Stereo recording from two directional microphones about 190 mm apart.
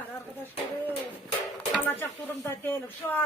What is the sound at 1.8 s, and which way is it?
Speech, 10° left (ahead or behind).